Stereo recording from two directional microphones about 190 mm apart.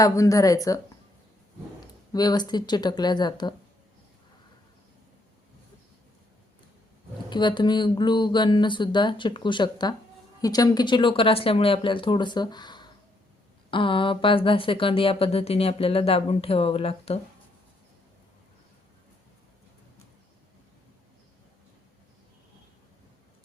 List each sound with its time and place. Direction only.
0.0 s speech: 15° left (ahead or behind)
2.1 s speech: 20° left (ahead or behind)
7.3 s speech: 25° left (ahead or behind)